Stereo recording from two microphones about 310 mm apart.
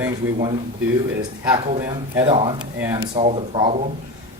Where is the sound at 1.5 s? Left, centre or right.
Centre.